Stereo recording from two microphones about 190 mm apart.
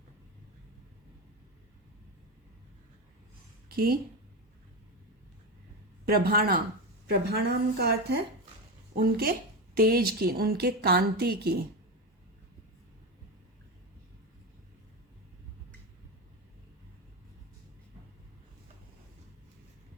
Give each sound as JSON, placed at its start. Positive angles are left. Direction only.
{"t": 3.7, "sound": "speech", "side_deg": -55}
{"t": 6.1, "sound": "a woman's voice", "side_deg": -55}